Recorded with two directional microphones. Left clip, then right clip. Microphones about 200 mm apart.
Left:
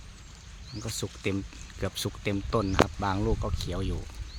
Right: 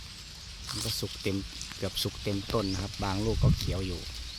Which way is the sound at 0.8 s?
5° left (ahead or behind).